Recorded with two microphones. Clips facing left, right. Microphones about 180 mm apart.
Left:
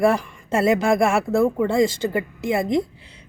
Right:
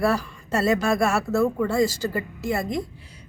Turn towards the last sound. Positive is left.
turn(degrees=20)  # may be behind; listen again after turning